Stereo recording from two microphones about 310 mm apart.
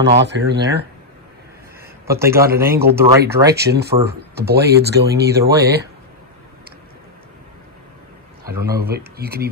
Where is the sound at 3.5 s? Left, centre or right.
Right.